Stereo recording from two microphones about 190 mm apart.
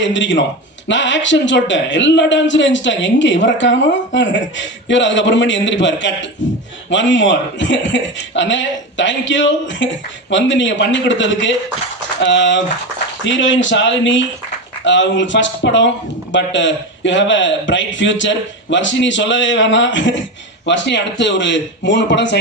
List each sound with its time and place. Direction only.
0.0 s a man's voice: 70° left (ahead or behind)